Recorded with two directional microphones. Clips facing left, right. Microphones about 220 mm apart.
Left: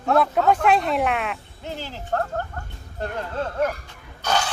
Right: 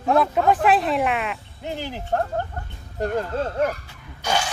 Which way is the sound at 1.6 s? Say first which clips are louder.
Right 6 dB; 15° right (ahead or behind).